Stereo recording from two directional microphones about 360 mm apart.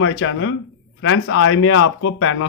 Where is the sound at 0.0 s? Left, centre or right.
Left.